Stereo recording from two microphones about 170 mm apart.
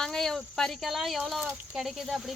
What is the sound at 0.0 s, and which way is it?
Speech, 5° left (ahead or behind).